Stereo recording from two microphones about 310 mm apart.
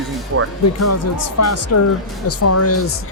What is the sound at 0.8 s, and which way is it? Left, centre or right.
Speech, left.